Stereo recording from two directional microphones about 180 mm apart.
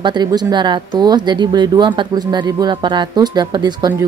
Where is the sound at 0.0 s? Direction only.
25° right (ahead or behind).